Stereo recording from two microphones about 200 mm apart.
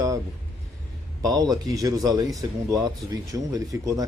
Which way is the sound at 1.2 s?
20° right (ahead or behind).